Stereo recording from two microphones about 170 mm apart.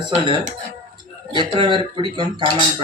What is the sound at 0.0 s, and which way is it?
Speech, 30° right (ahead or behind).